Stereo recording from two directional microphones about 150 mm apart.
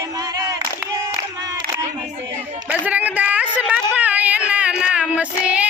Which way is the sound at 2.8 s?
10° right (ahead or behind).